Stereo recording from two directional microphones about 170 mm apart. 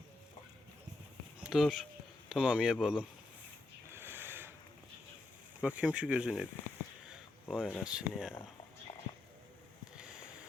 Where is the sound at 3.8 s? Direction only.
15° right (ahead or behind).